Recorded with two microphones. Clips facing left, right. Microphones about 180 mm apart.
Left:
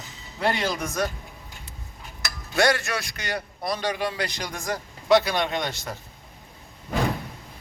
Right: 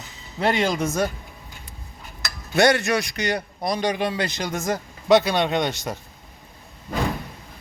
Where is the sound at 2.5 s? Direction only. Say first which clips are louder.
Right 4 dB; 20° right (ahead or behind).